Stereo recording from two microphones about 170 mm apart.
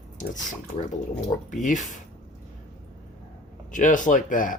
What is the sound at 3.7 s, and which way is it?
Speech, 50° left (ahead or behind).